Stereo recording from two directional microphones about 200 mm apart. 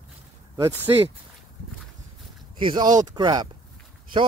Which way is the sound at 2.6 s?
25° right (ahead or behind).